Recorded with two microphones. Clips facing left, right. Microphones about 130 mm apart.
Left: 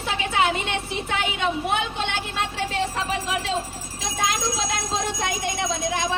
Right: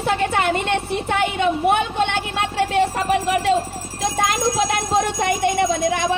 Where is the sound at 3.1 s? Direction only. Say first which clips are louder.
Right 8 dB; 60° right (ahead or behind).